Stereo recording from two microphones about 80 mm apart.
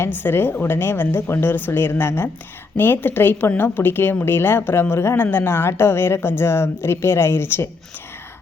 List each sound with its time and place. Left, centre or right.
0.0 s a woman's voice: left